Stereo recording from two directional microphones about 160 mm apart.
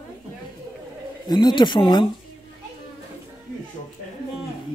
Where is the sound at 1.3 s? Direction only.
25° left (ahead or behind).